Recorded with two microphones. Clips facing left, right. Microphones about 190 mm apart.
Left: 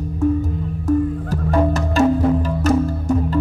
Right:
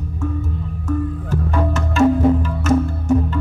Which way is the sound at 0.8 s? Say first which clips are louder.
Left 5 dB; 35° left (ahead or behind).